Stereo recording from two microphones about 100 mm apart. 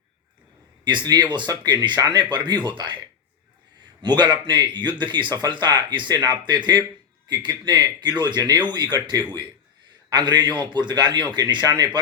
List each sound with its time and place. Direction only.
0.9 s speech: 50° right (ahead or behind)
4.0 s speech: 45° right (ahead or behind)